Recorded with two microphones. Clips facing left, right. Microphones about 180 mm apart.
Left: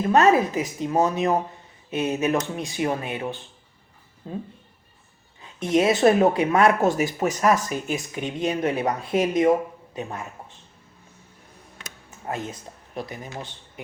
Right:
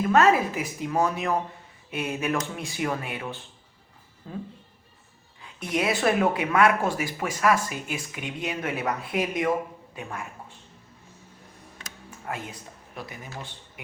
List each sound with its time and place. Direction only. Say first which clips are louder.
0.3 s speech: left 3 dB; 25° left (ahead or behind)
6.1 s speech: left 5 dB; 35° left (ahead or behind)
7.4 s speech: left 1 dB; 40° left (ahead or behind); by 10.2 s 25° left (ahead or behind)
12.3 s speech: left 4 dB; 30° left (ahead or behind)